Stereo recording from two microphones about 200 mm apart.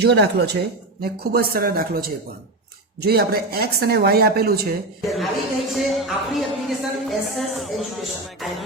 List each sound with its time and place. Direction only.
0.0 s speech: 55° right (ahead or behind)
5.0 s speech: centre (ahead or behind)